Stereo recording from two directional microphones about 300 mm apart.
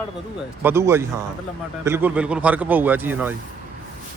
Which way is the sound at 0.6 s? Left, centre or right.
Centre.